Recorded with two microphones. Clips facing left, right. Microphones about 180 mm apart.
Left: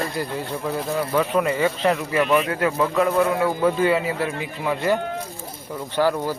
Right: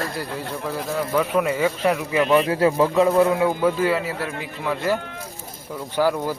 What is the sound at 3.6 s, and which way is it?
Speech, centre (ahead or behind).